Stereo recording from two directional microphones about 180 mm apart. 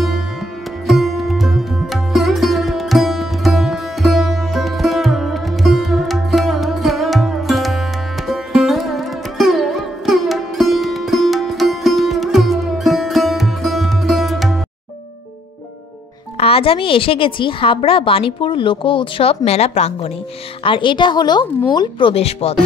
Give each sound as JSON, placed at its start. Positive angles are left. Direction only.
{"t": 0.8, "sound": "sitar", "side_deg": 0}
{"t": 8.3, "sound": "music", "side_deg": 0}
{"t": 16.3, "sound": "a woman's voice", "side_deg": 30}